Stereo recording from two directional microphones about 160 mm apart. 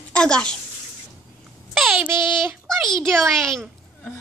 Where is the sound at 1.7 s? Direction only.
5° right (ahead or behind).